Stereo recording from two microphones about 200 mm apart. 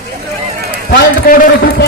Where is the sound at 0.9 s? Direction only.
50° left (ahead or behind).